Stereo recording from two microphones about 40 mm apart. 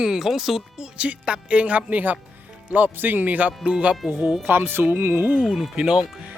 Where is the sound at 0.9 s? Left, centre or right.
Right.